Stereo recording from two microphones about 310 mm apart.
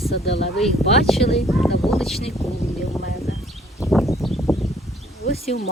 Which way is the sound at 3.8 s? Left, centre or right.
Centre.